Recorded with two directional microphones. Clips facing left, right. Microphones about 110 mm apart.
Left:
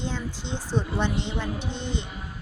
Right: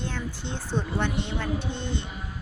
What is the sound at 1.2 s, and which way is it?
Speech, 15° left (ahead or behind).